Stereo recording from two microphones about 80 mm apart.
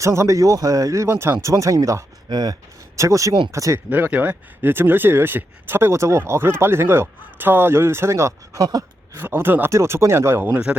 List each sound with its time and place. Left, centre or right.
0.0 s speech: right
2.3 s speech: right
2.9 s speech: right
3.8 s speech: right
8.5 s a sound: right
9.1 s speech: right
10.5 s a man's voice: centre